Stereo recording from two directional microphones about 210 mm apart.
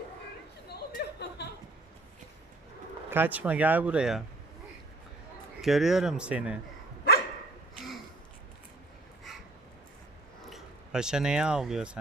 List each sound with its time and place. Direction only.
0.7 s a sound: 50° left (ahead or behind)
3.1 s speech: 10° right (ahead or behind)
5.6 s speech: centre (ahead or behind)
10.4 s speech: centre (ahead or behind)